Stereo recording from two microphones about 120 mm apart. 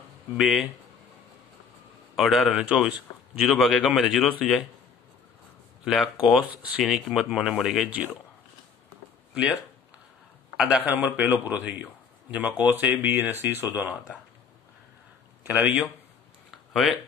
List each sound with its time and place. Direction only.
0.4 s speech: 5° right (ahead or behind)
2.1 s a man's voice: centre (ahead or behind)
6.3 s speech: 10° right (ahead or behind)
9.3 s speech: 5° right (ahead or behind)
10.9 s a man's voice: 15° right (ahead or behind)
15.4 s speech: 15° right (ahead or behind)
16.4 s a sound: centre (ahead or behind)